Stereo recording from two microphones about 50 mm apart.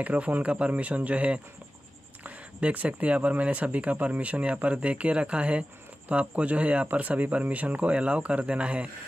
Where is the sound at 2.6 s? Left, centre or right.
Right.